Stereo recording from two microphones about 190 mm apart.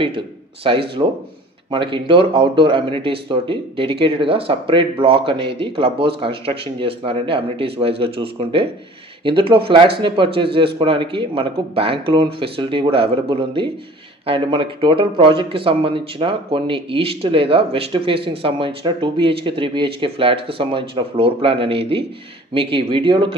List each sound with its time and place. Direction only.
0.7 s speech: 30° right (ahead or behind)